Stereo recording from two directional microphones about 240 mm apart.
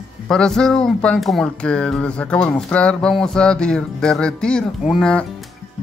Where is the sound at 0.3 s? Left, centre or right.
Centre.